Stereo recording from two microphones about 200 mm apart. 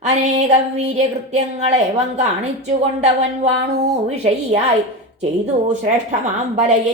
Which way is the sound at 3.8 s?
35° right (ahead or behind).